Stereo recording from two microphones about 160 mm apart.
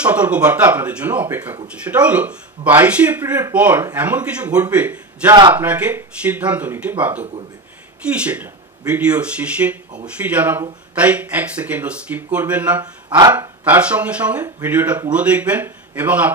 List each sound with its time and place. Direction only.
0.0 s a man's voice: 10° right (ahead or behind)
12.8 s speech: 25° right (ahead or behind)
13.3 s speech: 10° right (ahead or behind)